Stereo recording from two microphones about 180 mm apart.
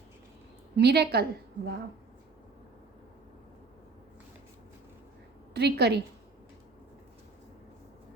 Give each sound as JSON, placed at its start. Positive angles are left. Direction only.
{"t": 0.8, "sound": "a woman's voice", "side_deg": -65}
{"t": 5.5, "sound": "a woman's voice", "side_deg": -65}